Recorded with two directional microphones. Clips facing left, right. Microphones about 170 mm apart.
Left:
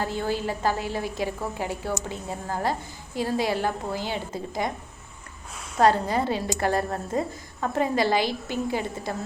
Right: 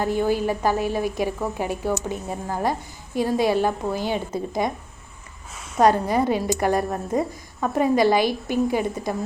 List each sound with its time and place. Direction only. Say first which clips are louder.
0.0 s a woman's voice: right 6 dB; 15° right (ahead or behind)
5.8 s a woman's voice: right 3 dB; 20° right (ahead or behind)